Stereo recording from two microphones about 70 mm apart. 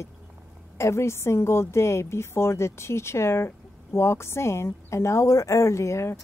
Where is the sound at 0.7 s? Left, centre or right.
Left.